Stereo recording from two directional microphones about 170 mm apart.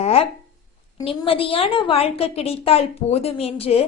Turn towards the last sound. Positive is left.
turn(degrees=35)  # may be behind; listen again after turning